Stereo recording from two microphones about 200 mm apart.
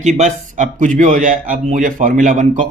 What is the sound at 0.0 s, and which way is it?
A man's voice, 35° right (ahead or behind).